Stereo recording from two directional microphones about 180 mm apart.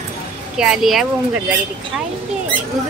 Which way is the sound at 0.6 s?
Centre (ahead or behind).